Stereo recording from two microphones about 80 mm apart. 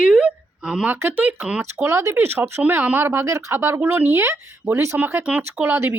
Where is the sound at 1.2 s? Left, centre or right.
Centre.